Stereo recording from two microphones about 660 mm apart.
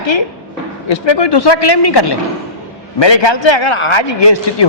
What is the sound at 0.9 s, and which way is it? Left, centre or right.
A man's voice, left.